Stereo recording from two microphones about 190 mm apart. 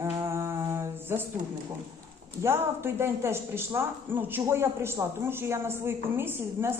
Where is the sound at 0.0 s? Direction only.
15° right (ahead or behind).